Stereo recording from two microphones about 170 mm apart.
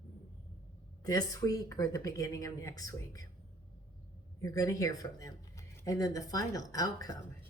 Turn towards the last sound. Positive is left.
turn(degrees=20)  # may be behind; listen again after turning